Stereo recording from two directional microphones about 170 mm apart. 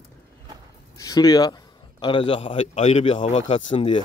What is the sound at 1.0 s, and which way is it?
A man's voice, 20° left (ahead or behind).